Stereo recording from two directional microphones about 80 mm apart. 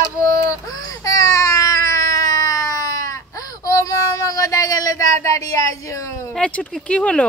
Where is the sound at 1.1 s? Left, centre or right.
Left.